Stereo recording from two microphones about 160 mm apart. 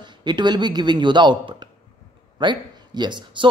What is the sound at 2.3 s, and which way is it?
A man's voice, 25° right (ahead or behind).